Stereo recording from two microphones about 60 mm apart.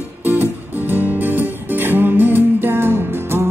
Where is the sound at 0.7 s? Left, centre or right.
Right.